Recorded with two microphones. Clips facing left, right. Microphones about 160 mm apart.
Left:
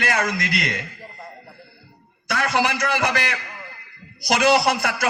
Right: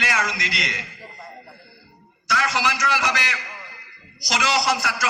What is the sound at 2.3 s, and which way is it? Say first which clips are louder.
A man's voice: left 2 dB; 55° left (ahead or behind).